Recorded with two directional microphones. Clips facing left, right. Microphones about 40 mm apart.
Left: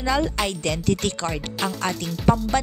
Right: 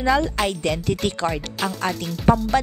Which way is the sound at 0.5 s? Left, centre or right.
Centre.